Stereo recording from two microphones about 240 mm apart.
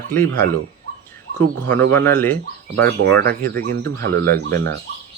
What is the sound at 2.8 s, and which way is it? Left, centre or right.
Speech, right.